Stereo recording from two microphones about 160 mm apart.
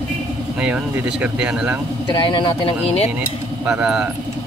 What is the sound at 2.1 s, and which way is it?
Speech, 30° left (ahead or behind).